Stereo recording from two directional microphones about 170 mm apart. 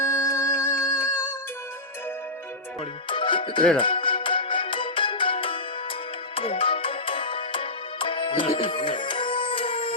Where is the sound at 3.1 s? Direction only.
30° left (ahead or behind).